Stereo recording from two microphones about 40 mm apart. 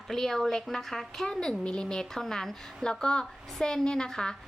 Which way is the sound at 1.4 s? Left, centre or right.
Left.